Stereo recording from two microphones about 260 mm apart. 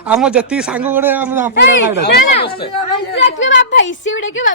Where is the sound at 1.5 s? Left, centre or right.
Left.